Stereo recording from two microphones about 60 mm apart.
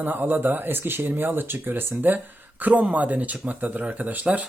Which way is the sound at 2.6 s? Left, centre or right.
Right.